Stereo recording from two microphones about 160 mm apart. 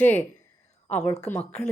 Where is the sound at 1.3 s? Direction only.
5° left (ahead or behind).